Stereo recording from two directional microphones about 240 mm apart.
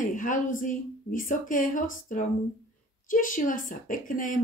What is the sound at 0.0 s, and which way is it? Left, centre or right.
A woman's voice, left.